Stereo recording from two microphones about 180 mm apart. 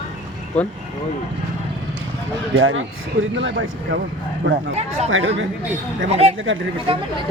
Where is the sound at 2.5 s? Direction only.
90° right.